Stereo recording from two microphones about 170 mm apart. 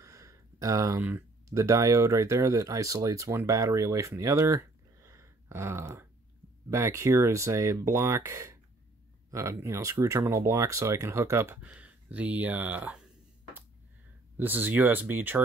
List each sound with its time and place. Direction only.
0.0 s speech: 20° right (ahead or behind)